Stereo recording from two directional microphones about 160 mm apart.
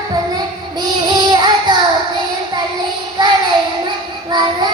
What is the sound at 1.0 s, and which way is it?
Child singing, 25° right (ahead or behind).